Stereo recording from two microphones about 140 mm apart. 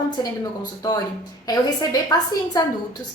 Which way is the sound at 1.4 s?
25° left (ahead or behind).